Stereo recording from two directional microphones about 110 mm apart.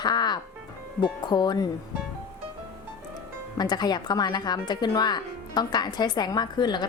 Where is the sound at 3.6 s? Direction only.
40° left (ahead or behind).